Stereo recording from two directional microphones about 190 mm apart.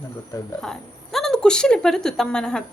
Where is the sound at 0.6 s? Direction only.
Centre (ahead or behind).